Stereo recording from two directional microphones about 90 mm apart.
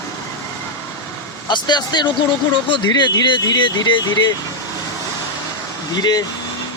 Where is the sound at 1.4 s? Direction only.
55° left (ahead or behind).